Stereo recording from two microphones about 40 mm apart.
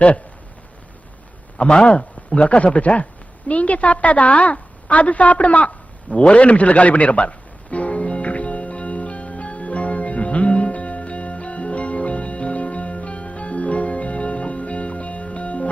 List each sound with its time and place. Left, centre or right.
1.5 s a woman's voice: left
6.1 s music: left